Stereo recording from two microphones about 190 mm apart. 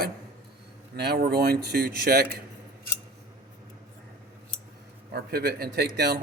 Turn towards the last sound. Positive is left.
turn(degrees=-55)  # may be behind; listen again after turning